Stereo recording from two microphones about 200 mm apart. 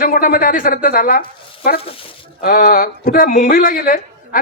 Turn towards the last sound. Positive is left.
turn(degrees=45)  # may be behind; listen again after turning